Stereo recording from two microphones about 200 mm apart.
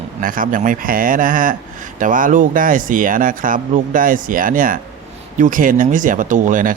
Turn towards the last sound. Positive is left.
turn(degrees=-40)  # may be behind; listen again after turning